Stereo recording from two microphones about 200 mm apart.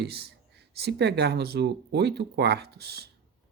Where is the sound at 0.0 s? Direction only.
55° right (ahead or behind).